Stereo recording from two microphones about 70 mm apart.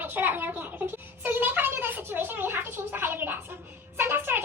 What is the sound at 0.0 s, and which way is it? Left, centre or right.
A woman's voice, right.